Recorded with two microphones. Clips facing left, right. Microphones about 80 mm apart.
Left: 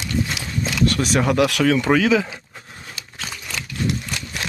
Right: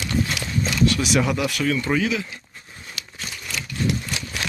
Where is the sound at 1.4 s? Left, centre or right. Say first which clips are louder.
Left 6 dB; left.